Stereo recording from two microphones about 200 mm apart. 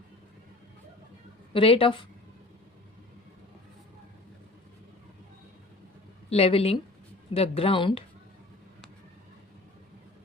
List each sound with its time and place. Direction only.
1.5 s speech: 25° left (ahead or behind)
6.3 s speech: 30° left (ahead or behind)